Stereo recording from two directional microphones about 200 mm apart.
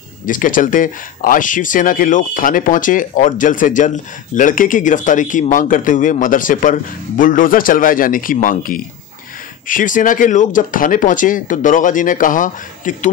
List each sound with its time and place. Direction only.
0.3 s speech: 40° left (ahead or behind)